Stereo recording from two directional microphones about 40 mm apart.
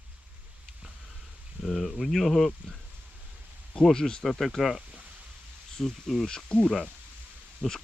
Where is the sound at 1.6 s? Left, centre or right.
Centre.